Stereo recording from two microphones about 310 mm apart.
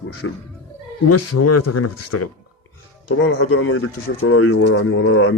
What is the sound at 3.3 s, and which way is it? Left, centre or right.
Speech, left.